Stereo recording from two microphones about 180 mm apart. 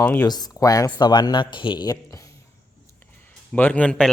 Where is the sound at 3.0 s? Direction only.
10° left (ahead or behind).